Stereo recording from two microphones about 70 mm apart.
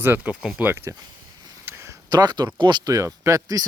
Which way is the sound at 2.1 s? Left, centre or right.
Right.